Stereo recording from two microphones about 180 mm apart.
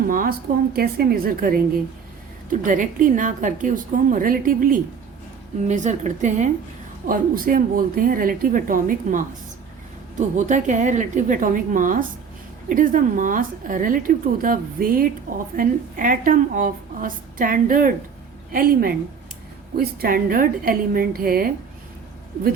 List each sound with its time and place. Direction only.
0.1 s a woman's voice: 55° right (ahead or behind)